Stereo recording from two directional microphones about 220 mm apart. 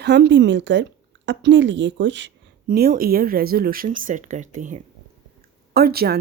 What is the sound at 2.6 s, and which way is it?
Speech, 45° right (ahead or behind).